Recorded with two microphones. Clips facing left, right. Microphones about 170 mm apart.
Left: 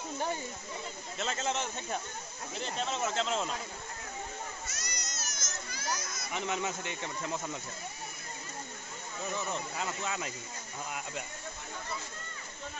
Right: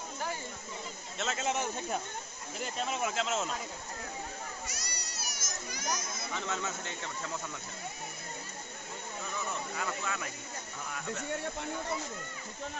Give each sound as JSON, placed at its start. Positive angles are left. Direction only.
{"t": 1.1, "sound": "speech", "side_deg": -5}
{"t": 4.6, "sound": "a sound", "side_deg": -10}
{"t": 6.3, "sound": "speech", "side_deg": 15}
{"t": 9.5, "sound": "speech", "side_deg": 20}